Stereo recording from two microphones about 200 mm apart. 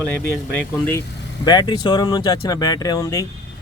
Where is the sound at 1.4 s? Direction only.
20° left (ahead or behind).